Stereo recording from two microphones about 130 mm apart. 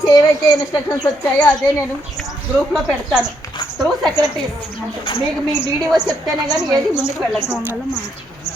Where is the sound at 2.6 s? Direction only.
Centre (ahead or behind).